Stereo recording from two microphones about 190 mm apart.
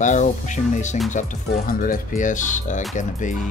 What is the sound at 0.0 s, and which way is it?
Speech, 40° left (ahead or behind).